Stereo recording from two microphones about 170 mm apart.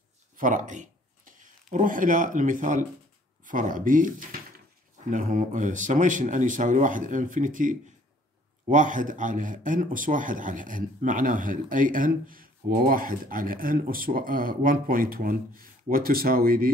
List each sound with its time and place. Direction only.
0.4 s speech: 50° right (ahead or behind)